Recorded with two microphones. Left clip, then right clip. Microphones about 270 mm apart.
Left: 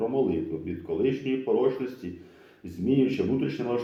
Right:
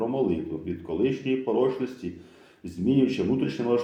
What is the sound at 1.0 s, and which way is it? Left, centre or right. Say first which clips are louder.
A man's voice: right 1 dB; right.